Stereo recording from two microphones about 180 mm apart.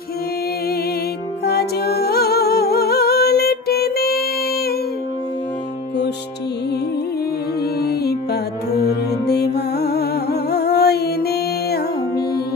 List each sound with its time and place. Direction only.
1.4 s music: 60° left (ahead or behind)
7.8 s music: 60° left (ahead or behind)